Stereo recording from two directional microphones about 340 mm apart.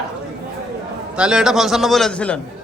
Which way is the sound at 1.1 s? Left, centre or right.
Centre.